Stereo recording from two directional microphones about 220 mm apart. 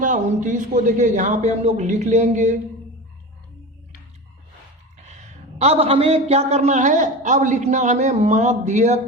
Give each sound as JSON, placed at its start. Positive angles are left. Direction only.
{"t": 0.0, "sound": "a man's voice", "side_deg": -35}
{"t": 4.9, "sound": "a man's voice", "side_deg": -30}